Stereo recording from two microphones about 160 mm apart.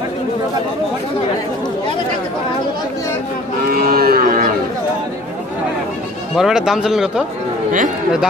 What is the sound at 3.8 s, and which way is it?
Cattle, 70° right (ahead or behind).